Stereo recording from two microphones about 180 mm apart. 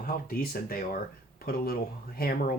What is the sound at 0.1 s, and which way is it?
Speech, 55° left (ahead or behind).